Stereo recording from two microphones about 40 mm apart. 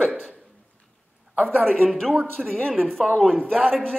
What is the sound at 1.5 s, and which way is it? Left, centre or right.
Speech, right.